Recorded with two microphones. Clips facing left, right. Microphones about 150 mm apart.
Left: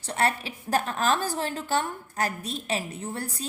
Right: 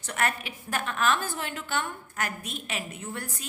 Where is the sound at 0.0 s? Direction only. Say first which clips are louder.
Left 3 dB; 30° left (ahead or behind).